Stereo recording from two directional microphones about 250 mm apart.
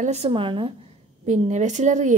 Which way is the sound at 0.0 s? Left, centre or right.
Right.